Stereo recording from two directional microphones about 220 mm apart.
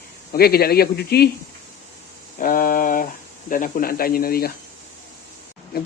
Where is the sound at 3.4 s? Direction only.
35° left (ahead or behind).